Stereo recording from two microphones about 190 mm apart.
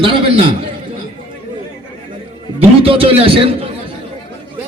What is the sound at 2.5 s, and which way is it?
A man's voice, 30° right (ahead or behind).